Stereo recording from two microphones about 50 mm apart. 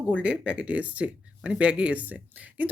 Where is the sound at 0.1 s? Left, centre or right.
Right.